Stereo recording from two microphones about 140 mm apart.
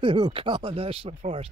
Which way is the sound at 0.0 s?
35° right (ahead or behind).